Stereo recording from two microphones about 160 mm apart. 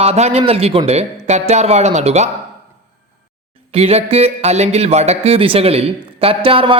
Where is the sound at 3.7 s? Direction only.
40° right (ahead or behind).